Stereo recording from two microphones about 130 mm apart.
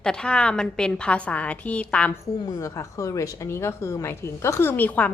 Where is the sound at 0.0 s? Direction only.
5° left (ahead or behind).